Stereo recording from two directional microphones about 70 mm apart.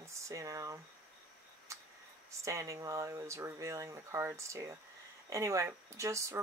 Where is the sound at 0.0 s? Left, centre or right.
Right.